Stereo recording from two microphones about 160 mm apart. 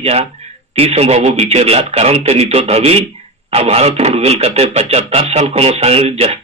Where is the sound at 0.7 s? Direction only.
40° right (ahead or behind).